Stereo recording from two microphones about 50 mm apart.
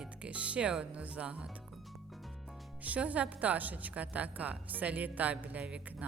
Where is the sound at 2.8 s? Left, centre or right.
Right.